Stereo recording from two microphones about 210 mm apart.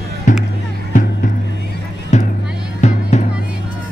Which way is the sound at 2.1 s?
35° left (ahead or behind).